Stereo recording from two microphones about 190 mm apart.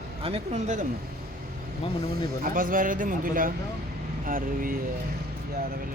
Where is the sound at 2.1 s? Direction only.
45° right (ahead or behind).